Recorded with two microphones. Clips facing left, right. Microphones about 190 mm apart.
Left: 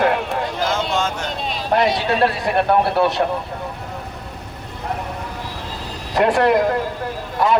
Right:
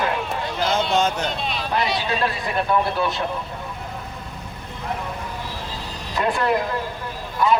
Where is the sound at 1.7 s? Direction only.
65° left (ahead or behind).